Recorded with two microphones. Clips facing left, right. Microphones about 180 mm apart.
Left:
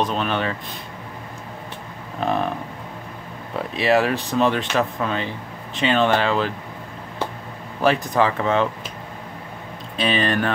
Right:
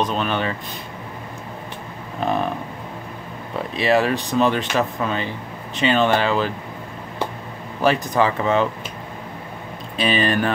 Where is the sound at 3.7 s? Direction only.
Centre (ahead or behind).